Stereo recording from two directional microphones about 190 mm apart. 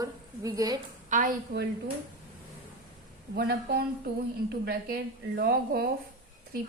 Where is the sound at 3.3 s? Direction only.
55° right (ahead or behind).